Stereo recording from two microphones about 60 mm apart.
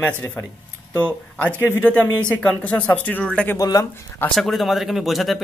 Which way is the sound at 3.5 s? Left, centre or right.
Left.